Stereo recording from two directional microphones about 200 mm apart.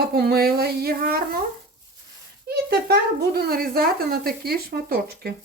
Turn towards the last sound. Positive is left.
turn(degrees=-50)  # may be behind; listen again after turning